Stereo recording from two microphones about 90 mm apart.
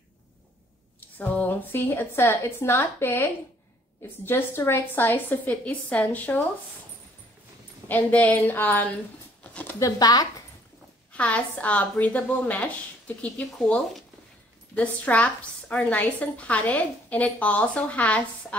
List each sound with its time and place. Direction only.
1.1 s a woman's voice: 20° left (ahead or behind)
7.9 s a woman's voice: 20° left (ahead or behind)
9.4 s a sound: 15° left (ahead or behind)
9.9 s speech: 45° left (ahead or behind)
11.1 s a woman's voice: 15° left (ahead or behind)